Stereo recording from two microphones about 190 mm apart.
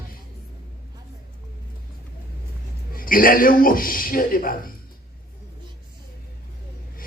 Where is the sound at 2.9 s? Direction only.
50° left (ahead or behind).